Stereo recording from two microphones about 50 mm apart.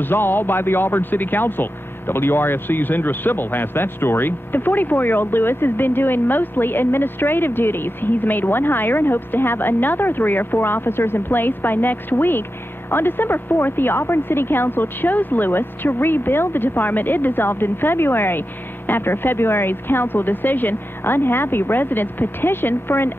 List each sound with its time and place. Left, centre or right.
0.0 s speech: left